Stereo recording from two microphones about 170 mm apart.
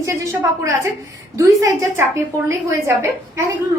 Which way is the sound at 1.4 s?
20° right (ahead or behind).